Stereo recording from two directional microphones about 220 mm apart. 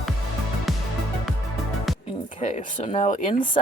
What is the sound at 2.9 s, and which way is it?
Speech, 30° left (ahead or behind).